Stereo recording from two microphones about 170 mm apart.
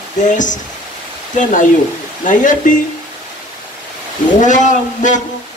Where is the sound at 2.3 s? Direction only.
50° left (ahead or behind).